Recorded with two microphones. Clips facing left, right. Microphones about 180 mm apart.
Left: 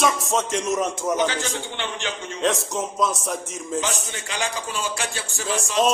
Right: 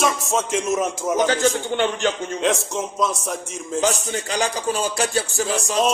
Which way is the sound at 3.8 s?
40° right (ahead or behind).